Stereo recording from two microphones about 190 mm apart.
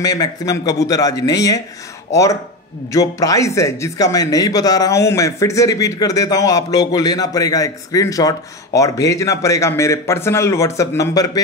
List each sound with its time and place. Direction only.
0.0 s a man's voice: 20° left (ahead or behind)
2.9 s a man's voice: 20° left (ahead or behind)